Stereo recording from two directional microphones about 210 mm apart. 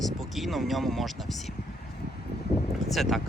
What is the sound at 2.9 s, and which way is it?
Speech, centre (ahead or behind).